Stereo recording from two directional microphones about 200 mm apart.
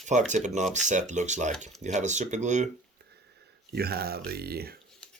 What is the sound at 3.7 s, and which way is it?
Speech, 50° right (ahead or behind).